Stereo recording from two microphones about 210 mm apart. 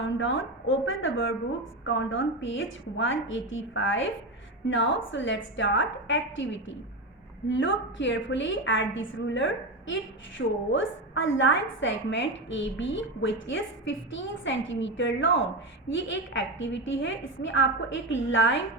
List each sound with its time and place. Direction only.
0.0 s a woman's voice: 65° left (ahead or behind)